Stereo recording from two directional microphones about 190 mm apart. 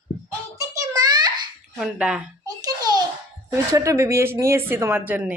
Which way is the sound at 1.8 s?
5° right (ahead or behind).